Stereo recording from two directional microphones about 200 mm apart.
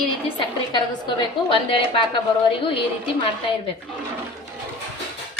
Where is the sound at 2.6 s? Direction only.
25° left (ahead or behind).